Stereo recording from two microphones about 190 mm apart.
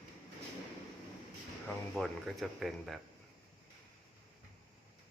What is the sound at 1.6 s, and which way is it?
Speech, centre (ahead or behind).